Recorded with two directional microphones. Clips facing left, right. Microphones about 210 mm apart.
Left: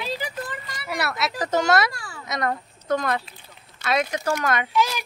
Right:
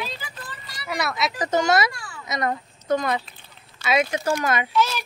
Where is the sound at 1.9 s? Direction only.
35° left (ahead or behind).